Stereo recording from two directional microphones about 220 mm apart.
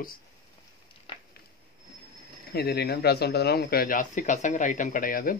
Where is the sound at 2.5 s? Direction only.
45° left (ahead or behind).